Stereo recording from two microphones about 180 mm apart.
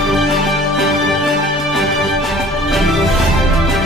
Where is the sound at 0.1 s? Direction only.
Centre (ahead or behind).